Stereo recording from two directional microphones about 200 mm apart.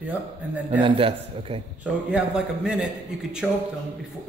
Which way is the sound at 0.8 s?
25° right (ahead or behind).